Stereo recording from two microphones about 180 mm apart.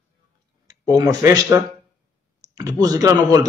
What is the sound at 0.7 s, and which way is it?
A man's voice, 20° right (ahead or behind).